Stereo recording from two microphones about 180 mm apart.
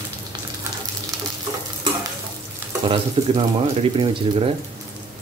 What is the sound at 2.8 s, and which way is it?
Speech, 30° right (ahead or behind).